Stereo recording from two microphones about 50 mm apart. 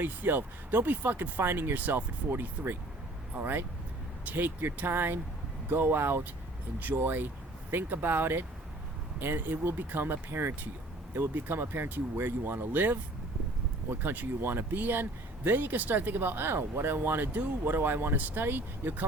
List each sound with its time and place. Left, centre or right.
0.0 s speech: right
6.7 s speech: right